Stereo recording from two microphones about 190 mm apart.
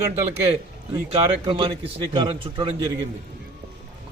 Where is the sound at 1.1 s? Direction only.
30° right (ahead or behind).